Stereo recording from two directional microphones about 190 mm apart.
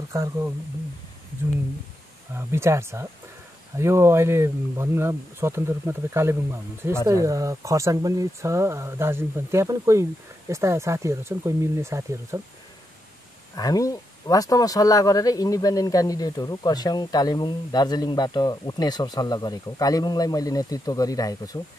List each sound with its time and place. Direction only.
0.1 s speech: 15° right (ahead or behind)
2.3 s speech: 15° right (ahead or behind)
13.6 s speech: 20° left (ahead or behind)